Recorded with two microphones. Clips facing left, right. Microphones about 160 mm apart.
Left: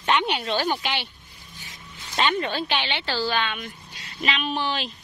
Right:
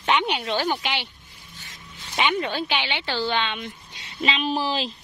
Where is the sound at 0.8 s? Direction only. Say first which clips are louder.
Even; 15° right (ahead or behind).